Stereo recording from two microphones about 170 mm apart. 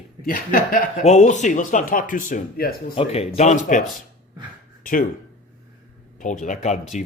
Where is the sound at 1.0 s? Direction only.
45° left (ahead or behind).